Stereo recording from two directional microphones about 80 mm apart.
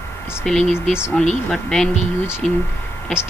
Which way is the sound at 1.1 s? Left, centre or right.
Centre.